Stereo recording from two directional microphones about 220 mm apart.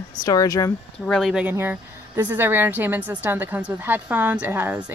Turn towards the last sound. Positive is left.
turn(degrees=-10)  # may be behind; listen again after turning